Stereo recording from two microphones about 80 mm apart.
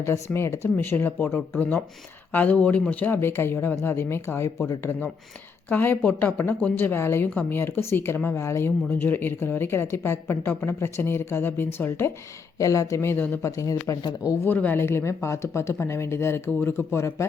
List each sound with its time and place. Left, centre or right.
0.0 s speech: left
12.5 s speech: left
13.4 s speech: left
14.4 s speech: left